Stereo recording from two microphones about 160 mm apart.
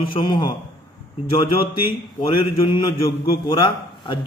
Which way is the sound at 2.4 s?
40° left (ahead or behind).